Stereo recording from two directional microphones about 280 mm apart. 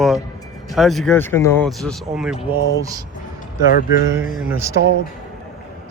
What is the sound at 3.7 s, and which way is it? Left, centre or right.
Speech, left.